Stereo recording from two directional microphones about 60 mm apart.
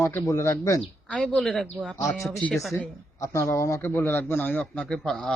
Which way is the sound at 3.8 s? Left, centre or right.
Left.